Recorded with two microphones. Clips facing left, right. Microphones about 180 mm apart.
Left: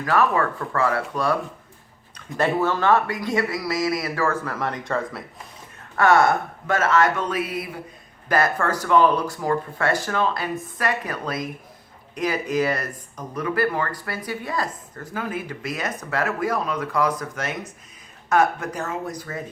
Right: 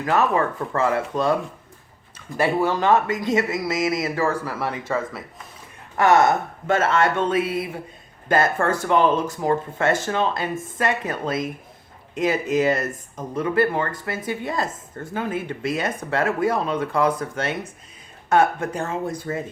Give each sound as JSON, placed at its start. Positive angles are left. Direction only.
{"t": 0.0, "sound": "speech", "side_deg": -20}
{"t": 2.1, "sound": "a man's voice", "side_deg": -10}
{"t": 6.0, "sound": "speech", "side_deg": -20}